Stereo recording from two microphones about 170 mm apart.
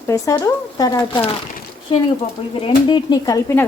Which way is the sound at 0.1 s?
20° left (ahead or behind).